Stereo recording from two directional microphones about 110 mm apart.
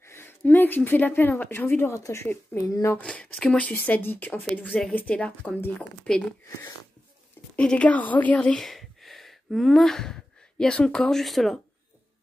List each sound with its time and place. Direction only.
0.0 s speech: 20° left (ahead or behind)
3.0 s speech: 10° left (ahead or behind)
7.5 s speech: 10° left (ahead or behind)